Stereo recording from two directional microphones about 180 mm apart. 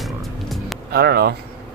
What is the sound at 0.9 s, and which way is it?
Speech, 60° right (ahead or behind).